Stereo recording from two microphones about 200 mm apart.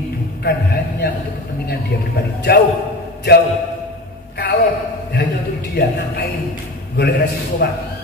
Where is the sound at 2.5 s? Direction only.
55° left (ahead or behind).